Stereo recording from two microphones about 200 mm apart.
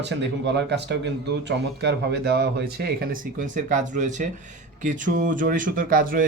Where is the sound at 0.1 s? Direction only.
60° right (ahead or behind).